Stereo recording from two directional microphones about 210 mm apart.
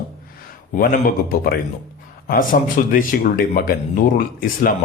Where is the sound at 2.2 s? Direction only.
40° left (ahead or behind).